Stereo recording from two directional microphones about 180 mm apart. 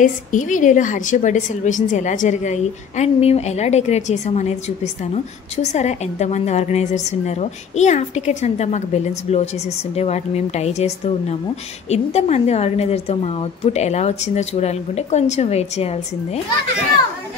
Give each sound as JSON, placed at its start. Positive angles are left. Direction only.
{"t": 0.0, "sound": "a woman's voice", "side_deg": 45}